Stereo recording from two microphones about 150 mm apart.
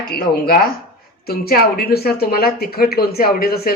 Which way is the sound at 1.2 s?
90° left.